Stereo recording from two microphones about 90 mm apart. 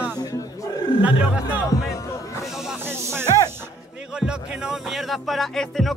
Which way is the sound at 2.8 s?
25° right (ahead or behind).